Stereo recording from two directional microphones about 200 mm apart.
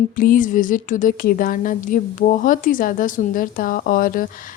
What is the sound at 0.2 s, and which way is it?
A woman's voice, 45° left (ahead or behind).